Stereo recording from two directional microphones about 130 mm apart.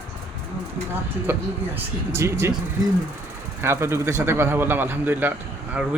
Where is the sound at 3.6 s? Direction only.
20° right (ahead or behind).